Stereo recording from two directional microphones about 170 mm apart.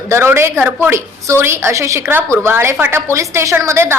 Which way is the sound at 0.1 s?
15° right (ahead or behind).